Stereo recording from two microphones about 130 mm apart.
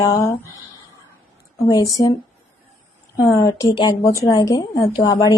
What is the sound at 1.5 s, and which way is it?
Speech, 25° left (ahead or behind).